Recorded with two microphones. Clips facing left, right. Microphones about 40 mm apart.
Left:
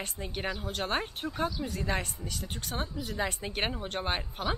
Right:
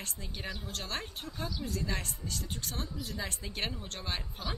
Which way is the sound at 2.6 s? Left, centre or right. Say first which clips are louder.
Left 4 dB; centre.